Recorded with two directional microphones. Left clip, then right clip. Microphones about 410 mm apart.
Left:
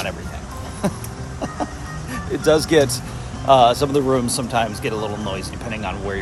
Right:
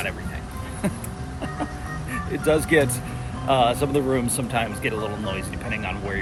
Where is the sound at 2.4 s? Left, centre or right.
Centre.